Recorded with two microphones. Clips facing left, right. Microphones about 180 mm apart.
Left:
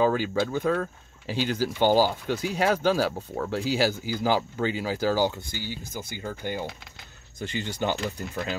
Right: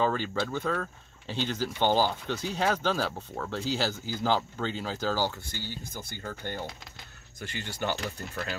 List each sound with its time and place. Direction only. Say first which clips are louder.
0.0 s speech: left 5 dB; 10° left (ahead or behind)